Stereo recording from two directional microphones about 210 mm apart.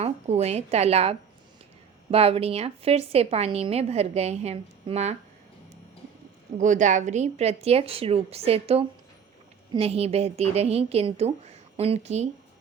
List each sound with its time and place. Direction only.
0.0 s a woman's voice: 30° right (ahead or behind)
6.6 s a woman's voice: 35° right (ahead or behind)